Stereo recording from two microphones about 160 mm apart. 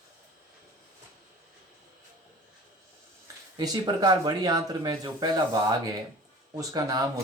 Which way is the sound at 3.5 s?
25° right (ahead or behind).